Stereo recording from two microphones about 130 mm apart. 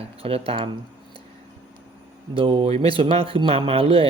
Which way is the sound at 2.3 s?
40° right (ahead or behind).